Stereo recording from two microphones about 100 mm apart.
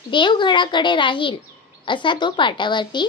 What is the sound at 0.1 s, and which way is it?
A child's voice, 55° left (ahead or behind).